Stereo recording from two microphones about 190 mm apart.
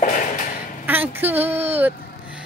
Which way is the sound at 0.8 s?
10° right (ahead or behind).